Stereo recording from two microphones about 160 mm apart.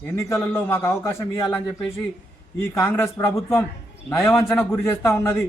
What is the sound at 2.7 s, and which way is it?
A man's voice, 15° left (ahead or behind).